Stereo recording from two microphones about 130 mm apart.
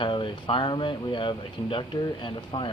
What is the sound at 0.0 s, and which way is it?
Speech, 40° left (ahead or behind).